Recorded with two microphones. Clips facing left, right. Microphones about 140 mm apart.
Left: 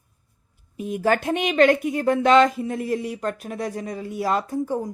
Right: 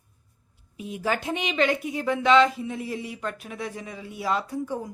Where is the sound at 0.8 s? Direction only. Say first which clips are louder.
Left 6 dB; 50° left (ahead or behind).